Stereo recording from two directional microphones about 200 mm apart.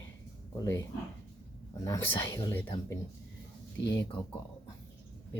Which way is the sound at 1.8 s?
15° left (ahead or behind).